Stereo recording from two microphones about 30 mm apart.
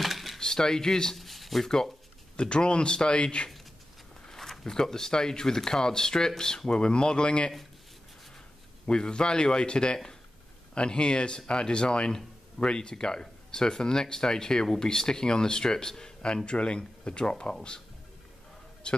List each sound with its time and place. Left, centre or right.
0.0 s a sound: centre
0.4 s speech: left
1.1 s a sound: centre
2.3 s speech: left
4.6 s speech: centre
6.7 s speech: left
8.8 s speech: left
18.8 s a man's voice: left